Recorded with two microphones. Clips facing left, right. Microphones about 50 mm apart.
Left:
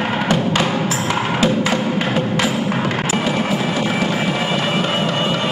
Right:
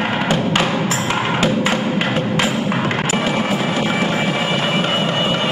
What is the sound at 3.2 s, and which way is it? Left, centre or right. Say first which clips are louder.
Music: even; centre.